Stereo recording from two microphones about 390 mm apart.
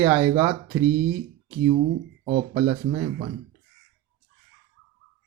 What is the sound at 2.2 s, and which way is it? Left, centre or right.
Speech, centre.